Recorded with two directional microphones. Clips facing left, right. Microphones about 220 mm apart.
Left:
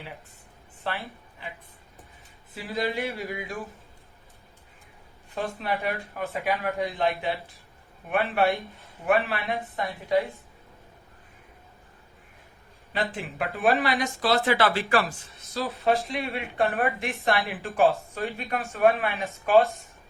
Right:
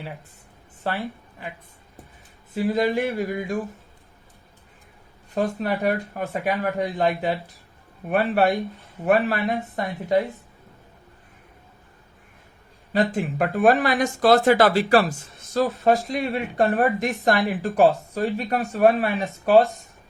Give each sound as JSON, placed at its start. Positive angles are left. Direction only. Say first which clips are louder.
{"t": 0.9, "sound": "speech", "louder": "right 5 dB", "side_deg": -40}
{"t": 2.6, "sound": "speech", "louder": "right 7 dB", "side_deg": -45}
{"t": 5.3, "sound": "speech", "louder": "right 6 dB", "side_deg": -45}
{"t": 12.9, "sound": "speech", "louder": "right 8 dB", "side_deg": -45}